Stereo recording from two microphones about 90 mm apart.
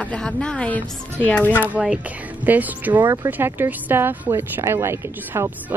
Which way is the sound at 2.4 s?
20° right (ahead or behind).